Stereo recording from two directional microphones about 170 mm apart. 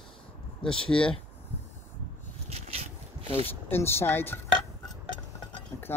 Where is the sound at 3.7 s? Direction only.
15° left (ahead or behind).